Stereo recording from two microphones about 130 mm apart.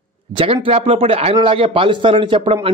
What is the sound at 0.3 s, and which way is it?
A man's voice, 40° right (ahead or behind).